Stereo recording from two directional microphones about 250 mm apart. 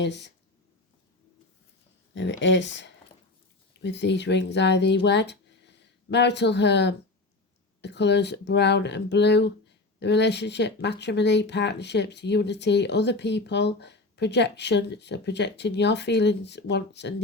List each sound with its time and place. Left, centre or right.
0.0 s speech: left
2.1 s speech: left